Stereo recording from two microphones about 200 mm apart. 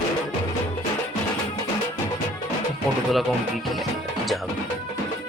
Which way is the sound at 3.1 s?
Centre (ahead or behind).